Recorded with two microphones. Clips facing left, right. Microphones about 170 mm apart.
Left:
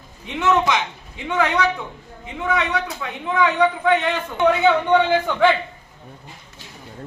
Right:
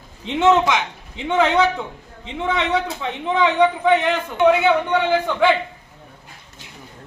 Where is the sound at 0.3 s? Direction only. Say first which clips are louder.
Right 3 dB; 25° right (ahead or behind).